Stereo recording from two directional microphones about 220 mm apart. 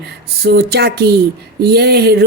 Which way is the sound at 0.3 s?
45° right (ahead or behind).